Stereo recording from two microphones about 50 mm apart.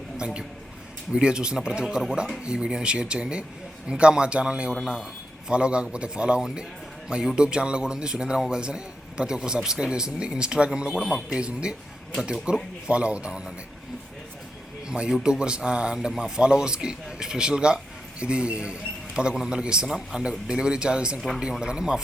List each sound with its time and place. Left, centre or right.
0.2 s a man's voice: centre
2.4 s a man's voice: centre
14.8 s a man's voice: centre